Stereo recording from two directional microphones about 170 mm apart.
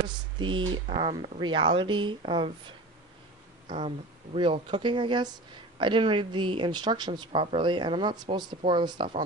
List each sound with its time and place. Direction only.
0.4 s speech: 30° right (ahead or behind)
3.6 s speech: 35° right (ahead or behind)